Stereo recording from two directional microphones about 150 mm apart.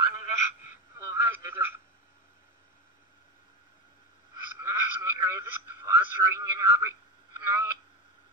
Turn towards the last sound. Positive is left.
turn(degrees=-20)  # may be behind; listen again after turning